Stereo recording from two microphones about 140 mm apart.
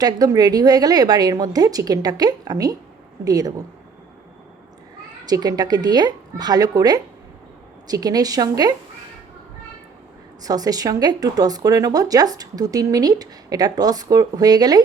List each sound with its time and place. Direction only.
0.0 s a woman's voice: 25° right (ahead or behind)
5.2 s a woman's voice: 30° right (ahead or behind)
10.4 s a woman's voice: 25° right (ahead or behind)